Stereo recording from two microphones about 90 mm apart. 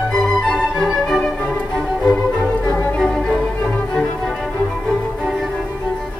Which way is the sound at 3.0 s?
5° left (ahead or behind).